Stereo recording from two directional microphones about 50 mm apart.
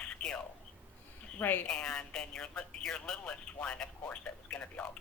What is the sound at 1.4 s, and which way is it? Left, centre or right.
Speech, left.